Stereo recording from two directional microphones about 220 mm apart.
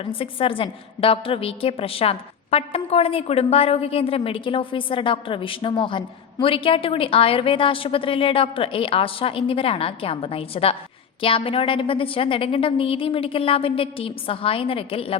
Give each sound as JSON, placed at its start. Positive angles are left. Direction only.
{"t": 0.0, "sound": "a woman's voice", "side_deg": 25}